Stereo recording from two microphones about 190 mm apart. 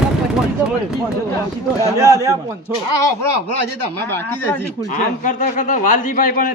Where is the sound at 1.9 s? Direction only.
15° right (ahead or behind).